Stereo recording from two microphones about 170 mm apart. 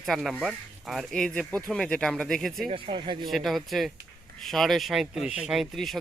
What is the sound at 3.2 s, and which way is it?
Speech, centre (ahead or behind).